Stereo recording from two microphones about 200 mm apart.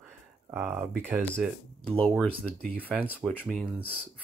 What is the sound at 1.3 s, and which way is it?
Speech, 5° left (ahead or behind).